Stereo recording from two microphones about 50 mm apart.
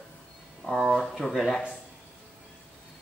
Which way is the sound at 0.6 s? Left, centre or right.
Left.